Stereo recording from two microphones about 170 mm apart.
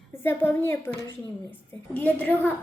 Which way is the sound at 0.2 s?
15° left (ahead or behind).